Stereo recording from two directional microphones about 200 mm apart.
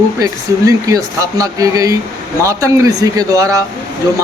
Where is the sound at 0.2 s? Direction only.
15° right (ahead or behind).